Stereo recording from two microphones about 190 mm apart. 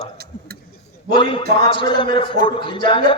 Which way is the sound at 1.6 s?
25° left (ahead or behind).